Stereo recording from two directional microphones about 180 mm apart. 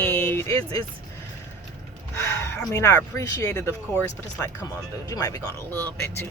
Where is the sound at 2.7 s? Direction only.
15° left (ahead or behind).